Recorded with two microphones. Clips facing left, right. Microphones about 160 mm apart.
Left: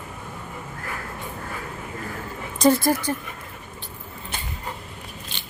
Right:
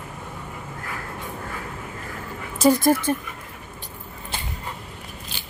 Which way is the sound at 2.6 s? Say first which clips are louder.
Right 1 dB; 15° right (ahead or behind).